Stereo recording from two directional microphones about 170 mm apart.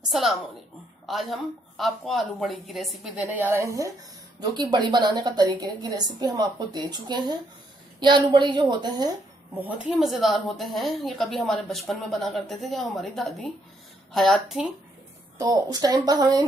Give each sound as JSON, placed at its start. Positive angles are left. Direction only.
{"t": 0.1, "sound": "a woman's voice", "side_deg": 0}
{"t": 9.8, "sound": "a woman's voice", "side_deg": -5}
{"t": 15.3, "sound": "a woman's voice", "side_deg": -20}